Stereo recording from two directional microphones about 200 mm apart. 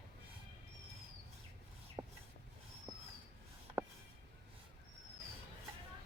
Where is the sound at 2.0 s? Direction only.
20° right (ahead or behind).